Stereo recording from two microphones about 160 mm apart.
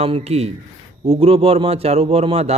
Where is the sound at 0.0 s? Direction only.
40° right (ahead or behind).